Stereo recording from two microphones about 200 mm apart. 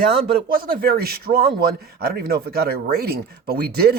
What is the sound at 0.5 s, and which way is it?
Speech, 45° right (ahead or behind).